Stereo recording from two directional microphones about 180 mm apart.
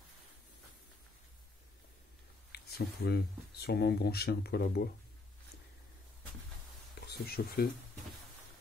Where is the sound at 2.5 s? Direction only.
65° left (ahead or behind).